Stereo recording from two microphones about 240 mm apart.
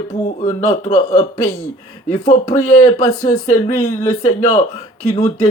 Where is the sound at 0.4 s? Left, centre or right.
Left.